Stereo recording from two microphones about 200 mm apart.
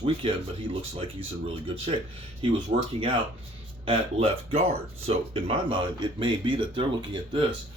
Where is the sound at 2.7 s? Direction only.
30° right (ahead or behind).